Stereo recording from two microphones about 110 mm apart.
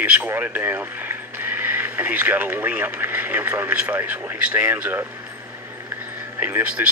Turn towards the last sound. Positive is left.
turn(degrees=-15)  # may be behind; listen again after turning